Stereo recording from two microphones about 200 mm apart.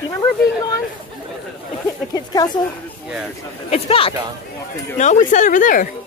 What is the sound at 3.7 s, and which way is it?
Speech, 30° left (ahead or behind).